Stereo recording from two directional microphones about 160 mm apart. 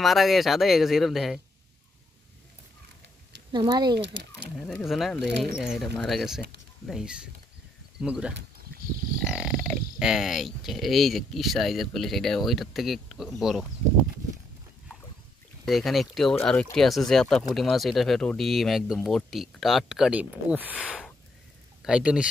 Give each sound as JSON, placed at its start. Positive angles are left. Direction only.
{"t": 0.0, "sound": "speech", "side_deg": 0}
{"t": 3.5, "sound": "speech", "side_deg": -25}
{"t": 4.0, "sound": "speech", "side_deg": -90}
{"t": 4.8, "sound": "speech", "side_deg": 0}
{"t": 15.6, "sound": "speech", "side_deg": 0}